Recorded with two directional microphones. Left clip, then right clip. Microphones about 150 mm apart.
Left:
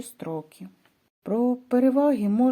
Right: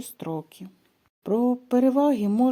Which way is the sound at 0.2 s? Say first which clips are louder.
Even; 30° right (ahead or behind).